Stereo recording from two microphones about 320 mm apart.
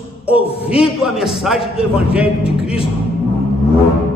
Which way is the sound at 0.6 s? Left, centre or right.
Centre.